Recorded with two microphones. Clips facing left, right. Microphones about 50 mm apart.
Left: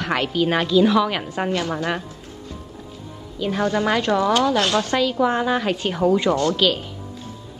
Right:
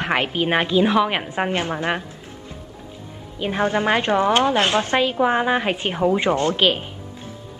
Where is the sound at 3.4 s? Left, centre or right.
Right.